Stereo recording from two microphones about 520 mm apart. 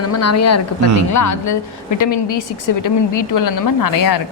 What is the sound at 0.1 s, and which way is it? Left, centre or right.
A woman's voice, left.